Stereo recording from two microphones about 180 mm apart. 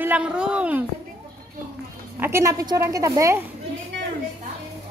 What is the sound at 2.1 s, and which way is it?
A woman's voice, 15° right (ahead or behind).